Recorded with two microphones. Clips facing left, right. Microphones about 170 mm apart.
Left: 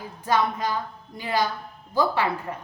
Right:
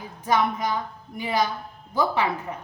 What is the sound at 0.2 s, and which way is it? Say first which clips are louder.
A woman's voice: right 1 dB; 20° right (ahead or behind).